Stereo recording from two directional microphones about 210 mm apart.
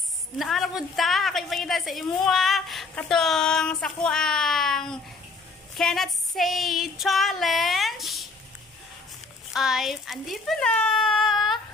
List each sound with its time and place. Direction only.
0.4 s a woman's voice: centre (ahead or behind)
9.5 s speech: 5° right (ahead or behind)